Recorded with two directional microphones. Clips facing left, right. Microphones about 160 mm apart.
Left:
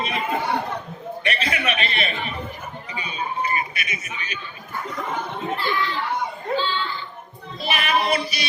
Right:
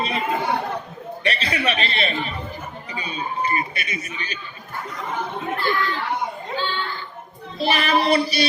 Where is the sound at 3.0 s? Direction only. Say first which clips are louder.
Right 1 dB; 35° right (ahead or behind).